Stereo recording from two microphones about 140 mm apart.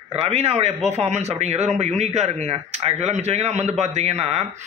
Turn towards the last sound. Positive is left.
turn(degrees=-50)  # may be behind; listen again after turning